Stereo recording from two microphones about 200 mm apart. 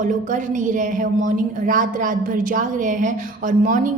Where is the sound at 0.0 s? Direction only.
40° right (ahead or behind).